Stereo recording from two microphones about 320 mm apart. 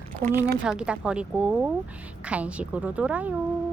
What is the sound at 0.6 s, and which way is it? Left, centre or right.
Speech, centre.